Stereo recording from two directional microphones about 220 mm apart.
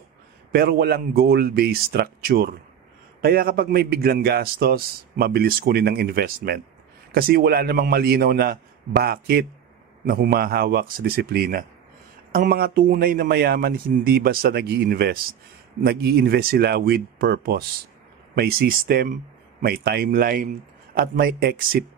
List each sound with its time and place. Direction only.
0.5 s a man's voice: 45° right (ahead or behind)